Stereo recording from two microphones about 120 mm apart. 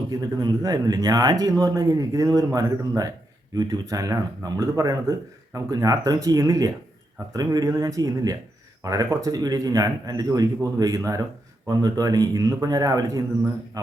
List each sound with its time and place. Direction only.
0.1 s speech: 35° right (ahead or behind)